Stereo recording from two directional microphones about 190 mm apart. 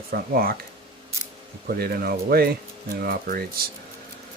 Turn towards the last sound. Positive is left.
turn(degrees=-50)  # may be behind; listen again after turning